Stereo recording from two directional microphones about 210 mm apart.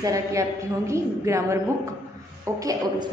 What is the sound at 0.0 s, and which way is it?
A woman's voice, 15° right (ahead or behind).